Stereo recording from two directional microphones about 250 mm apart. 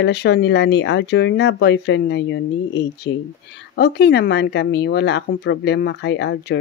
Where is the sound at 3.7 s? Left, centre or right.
Left.